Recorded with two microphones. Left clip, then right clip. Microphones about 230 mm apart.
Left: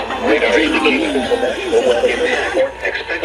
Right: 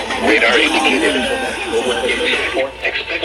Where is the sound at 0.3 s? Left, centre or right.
Right.